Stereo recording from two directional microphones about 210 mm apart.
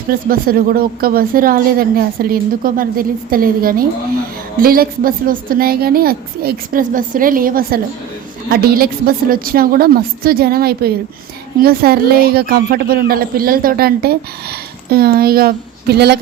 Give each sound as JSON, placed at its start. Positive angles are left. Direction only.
{"t": 0.1, "sound": "a woman's voice", "side_deg": -45}